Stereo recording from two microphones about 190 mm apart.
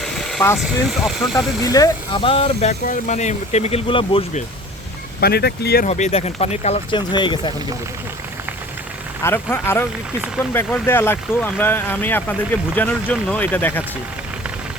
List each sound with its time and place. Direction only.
0.0 s vehicle: centre (ahead or behind)
0.6 s speech: centre (ahead or behind)
1.6 s speech: 20° left (ahead or behind)
5.2 s speech: 55° left (ahead or behind)
5.8 s speech: 35° left (ahead or behind)
7.1 s speech: 25° left (ahead or behind)
9.2 s speech: 10° left (ahead or behind)